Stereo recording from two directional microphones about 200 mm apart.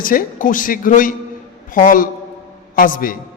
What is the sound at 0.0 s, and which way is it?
A man's voice, 45° left (ahead or behind).